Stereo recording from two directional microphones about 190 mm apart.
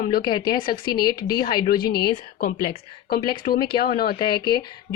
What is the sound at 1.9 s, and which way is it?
Speech, 55° left (ahead or behind).